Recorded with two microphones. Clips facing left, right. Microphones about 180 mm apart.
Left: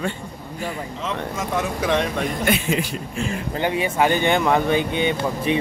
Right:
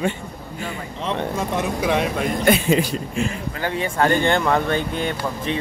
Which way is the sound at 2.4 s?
35° right (ahead or behind).